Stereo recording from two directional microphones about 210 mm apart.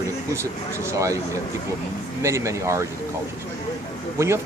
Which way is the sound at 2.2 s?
15° right (ahead or behind).